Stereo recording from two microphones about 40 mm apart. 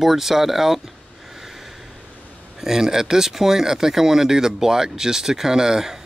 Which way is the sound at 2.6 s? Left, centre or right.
Centre.